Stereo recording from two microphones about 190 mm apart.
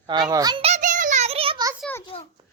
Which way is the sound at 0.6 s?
40° right (ahead or behind).